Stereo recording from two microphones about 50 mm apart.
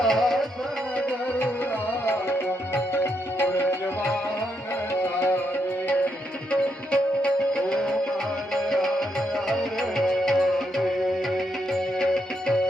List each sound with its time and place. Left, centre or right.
0.0 s music: centre
2.9 s music: left
6.5 s music: left; by 11.8 s centre
11.9 s music: centre